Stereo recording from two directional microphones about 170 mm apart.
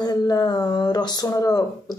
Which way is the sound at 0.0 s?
25° left (ahead or behind).